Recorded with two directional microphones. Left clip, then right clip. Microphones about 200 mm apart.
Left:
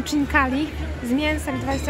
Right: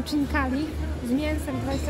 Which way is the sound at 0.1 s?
20° left (ahead or behind).